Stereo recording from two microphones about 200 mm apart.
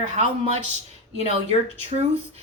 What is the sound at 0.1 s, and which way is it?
Speech, 35° right (ahead or behind).